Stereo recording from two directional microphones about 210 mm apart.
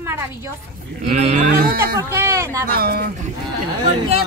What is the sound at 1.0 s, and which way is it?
Speech, 30° right (ahead or behind).